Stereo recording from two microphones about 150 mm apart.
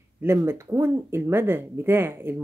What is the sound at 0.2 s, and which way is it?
Speech, 15° right (ahead or behind).